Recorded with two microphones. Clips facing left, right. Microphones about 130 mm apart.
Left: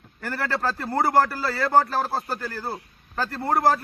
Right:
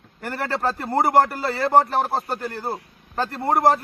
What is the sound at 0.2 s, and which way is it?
A man's voice, 20° right (ahead or behind).